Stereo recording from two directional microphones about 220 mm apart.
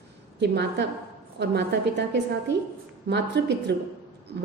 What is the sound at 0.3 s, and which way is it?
A woman's voice, 50° right (ahead or behind).